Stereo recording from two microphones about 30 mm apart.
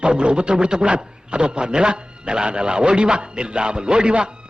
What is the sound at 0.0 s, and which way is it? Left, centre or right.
A man's voice, right.